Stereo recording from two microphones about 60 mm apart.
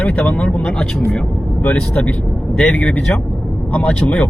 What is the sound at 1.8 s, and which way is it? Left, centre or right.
Speech, left.